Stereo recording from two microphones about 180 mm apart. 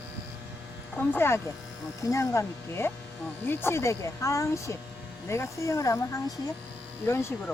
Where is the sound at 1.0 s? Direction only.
10° left (ahead or behind).